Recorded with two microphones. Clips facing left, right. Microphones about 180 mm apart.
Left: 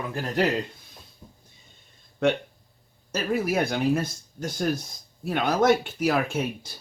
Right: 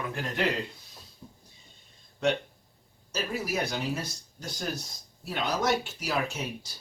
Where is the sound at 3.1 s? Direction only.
55° left (ahead or behind).